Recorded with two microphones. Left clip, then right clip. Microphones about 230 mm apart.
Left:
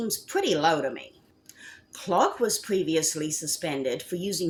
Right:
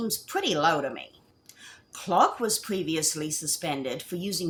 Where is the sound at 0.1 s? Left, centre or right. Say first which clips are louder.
Left 4 dB; right.